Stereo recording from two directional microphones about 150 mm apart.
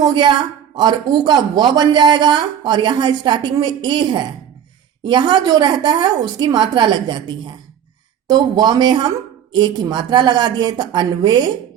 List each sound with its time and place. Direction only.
0.0 s a woman's voice: 30° right (ahead or behind)